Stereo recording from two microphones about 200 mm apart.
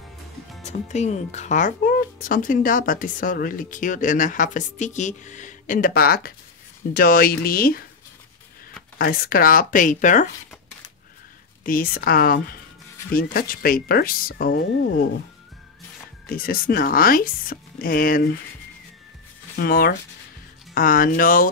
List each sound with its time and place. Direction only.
0.7 s speech: 35° left (ahead or behind)
8.9 s speech: 45° left (ahead or behind)
11.6 s speech: 45° left (ahead or behind)
16.3 s speech: 45° left (ahead or behind)
19.5 s speech: 50° left (ahead or behind)